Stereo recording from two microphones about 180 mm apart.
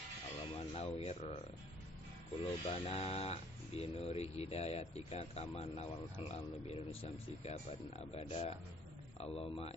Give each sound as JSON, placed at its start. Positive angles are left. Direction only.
{"t": 0.5, "sound": "music", "side_deg": 35}
{"t": 0.9, "sound": "speech", "side_deg": 35}
{"t": 2.4, "sound": "speech", "side_deg": 30}